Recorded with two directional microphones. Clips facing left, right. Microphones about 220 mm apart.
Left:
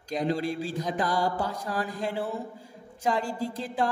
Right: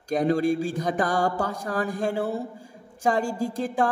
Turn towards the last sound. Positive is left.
turn(degrees=-50)  # may be behind; listen again after turning